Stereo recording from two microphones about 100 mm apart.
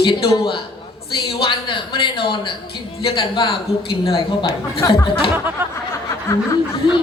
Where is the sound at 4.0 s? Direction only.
70° left (ahead or behind).